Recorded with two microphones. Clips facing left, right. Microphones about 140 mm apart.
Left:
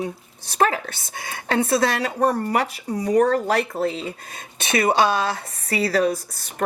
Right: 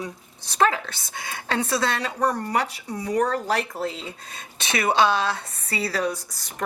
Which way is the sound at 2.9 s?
35° left (ahead or behind).